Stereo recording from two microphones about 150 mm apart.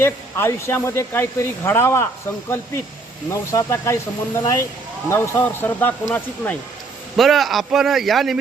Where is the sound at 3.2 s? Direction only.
20° left (ahead or behind).